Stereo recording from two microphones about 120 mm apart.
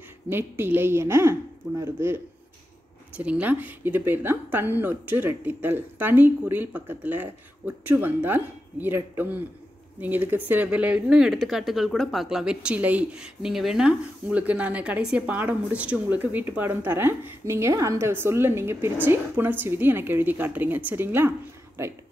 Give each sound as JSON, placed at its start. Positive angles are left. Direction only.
{"t": 0.3, "sound": "a woman's voice", "side_deg": -20}